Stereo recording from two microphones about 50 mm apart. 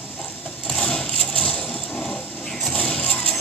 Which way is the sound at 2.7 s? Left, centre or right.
Centre.